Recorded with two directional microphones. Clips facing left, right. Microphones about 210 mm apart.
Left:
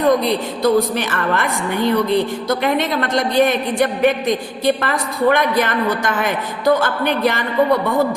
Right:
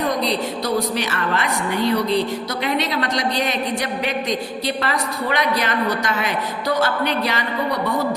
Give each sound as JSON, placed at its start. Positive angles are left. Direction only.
{"t": 0.2, "sound": "a woman's voice", "side_deg": 50}